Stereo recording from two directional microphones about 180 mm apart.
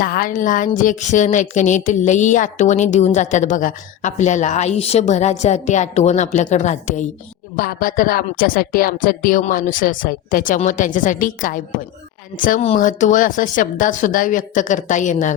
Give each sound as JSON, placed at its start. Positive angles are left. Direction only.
{"t": 0.0, "sound": "speech", "side_deg": 50}
{"t": 7.5, "sound": "speech", "side_deg": 55}